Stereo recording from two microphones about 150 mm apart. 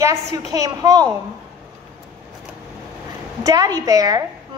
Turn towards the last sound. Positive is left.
turn(degrees=-25)  # may be behind; listen again after turning